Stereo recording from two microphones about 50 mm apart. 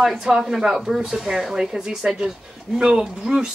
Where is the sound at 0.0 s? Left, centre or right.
Centre.